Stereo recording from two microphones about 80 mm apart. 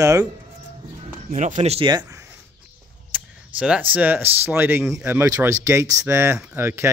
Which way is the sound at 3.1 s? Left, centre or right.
Centre.